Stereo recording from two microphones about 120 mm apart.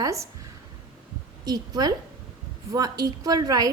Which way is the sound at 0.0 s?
25° right (ahead or behind).